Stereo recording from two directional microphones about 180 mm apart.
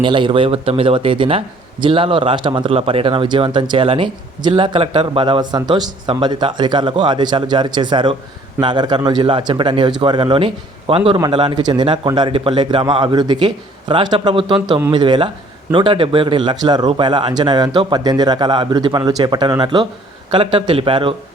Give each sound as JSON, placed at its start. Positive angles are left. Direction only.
{"t": 0.0, "sound": "speech", "side_deg": -25}